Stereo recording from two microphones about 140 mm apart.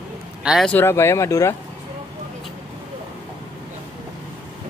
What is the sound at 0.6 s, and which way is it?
Speech, 15° left (ahead or behind).